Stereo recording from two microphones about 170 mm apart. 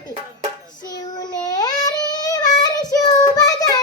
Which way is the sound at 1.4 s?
25° left (ahead or behind).